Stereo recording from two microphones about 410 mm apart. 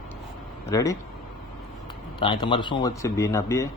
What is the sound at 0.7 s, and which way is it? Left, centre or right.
Speech, centre.